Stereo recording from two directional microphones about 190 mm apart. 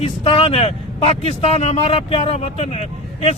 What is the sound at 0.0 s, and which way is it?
Speech, 30° left (ahead or behind).